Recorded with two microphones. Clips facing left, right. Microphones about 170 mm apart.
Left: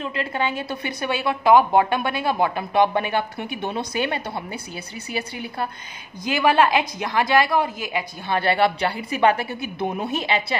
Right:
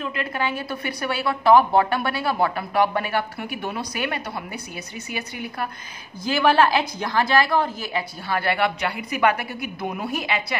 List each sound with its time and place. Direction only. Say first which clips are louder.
0.0 s a woman's voice: left 1 dB; 25° left (ahead or behind)
6.2 s a woman's voice: even; 20° left (ahead or behind)